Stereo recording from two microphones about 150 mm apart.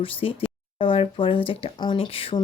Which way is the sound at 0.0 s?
35° left (ahead or behind).